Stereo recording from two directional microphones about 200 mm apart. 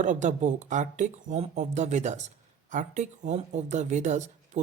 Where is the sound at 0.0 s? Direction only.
40° right (ahead or behind).